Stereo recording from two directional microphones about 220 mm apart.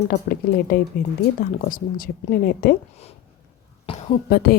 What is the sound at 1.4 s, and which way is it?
Speech, 40° left (ahead or behind).